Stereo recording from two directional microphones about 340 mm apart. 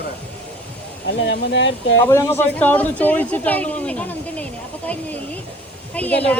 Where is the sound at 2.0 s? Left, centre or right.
Centre.